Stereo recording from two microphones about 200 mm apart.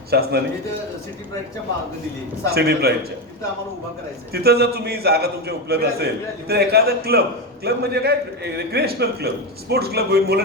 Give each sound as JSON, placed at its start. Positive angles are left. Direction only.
{"t": 0.1, "sound": "a man's voice", "side_deg": -55}
{"t": 2.5, "sound": "a man's voice", "side_deg": -50}
{"t": 4.3, "sound": "a man's voice", "side_deg": -50}